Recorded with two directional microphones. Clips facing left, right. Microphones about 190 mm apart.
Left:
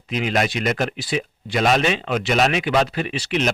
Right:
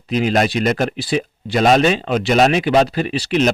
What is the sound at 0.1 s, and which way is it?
Speech, 35° right (ahead or behind).